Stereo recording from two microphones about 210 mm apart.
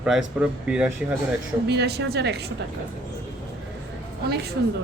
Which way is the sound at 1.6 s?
50° right (ahead or behind).